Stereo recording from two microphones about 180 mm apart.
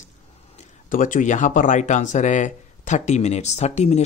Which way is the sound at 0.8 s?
45° left (ahead or behind).